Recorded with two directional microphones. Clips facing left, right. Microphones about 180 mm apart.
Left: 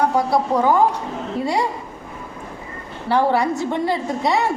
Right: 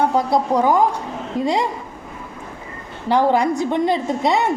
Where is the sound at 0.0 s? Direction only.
20° right (ahead or behind).